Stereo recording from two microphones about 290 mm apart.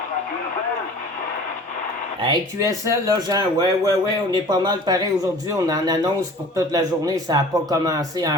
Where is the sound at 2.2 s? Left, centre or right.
Centre.